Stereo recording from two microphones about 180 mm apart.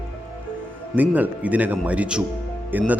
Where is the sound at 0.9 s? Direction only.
10° right (ahead or behind).